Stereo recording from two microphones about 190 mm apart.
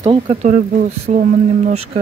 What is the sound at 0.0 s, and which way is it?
Speech, 35° right (ahead or behind).